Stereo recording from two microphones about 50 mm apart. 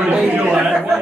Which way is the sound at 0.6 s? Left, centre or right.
Centre.